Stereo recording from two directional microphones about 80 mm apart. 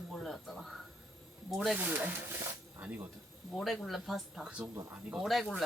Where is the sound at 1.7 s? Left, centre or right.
Centre.